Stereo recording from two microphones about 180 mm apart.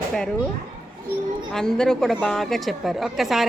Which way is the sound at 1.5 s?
5° left (ahead or behind).